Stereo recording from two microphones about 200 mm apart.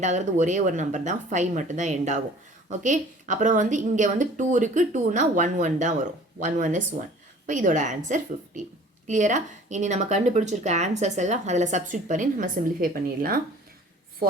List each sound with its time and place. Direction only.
0.0 s speech: 35° right (ahead or behind)